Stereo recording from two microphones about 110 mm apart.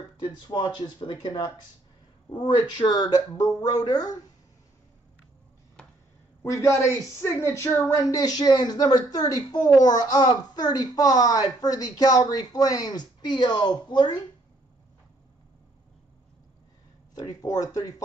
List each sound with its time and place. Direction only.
0.2 s speech: 45° left (ahead or behind)
6.4 s speech: 25° left (ahead or behind); by 14.2 s 45° left (ahead or behind)
17.2 s speech: 35° left (ahead or behind)